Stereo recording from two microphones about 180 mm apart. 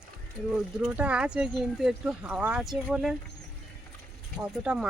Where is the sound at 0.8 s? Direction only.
5° right (ahead or behind).